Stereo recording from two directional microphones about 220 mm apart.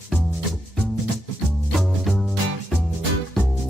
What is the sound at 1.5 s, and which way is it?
Music, centre (ahead or behind).